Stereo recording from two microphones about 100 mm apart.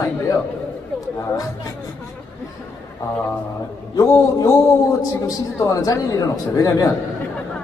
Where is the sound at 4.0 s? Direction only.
30° left (ahead or behind).